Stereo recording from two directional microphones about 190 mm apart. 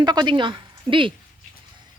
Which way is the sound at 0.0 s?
20° right (ahead or behind).